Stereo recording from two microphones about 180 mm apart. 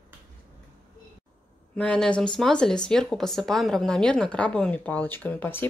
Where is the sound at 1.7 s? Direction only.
5° left (ahead or behind).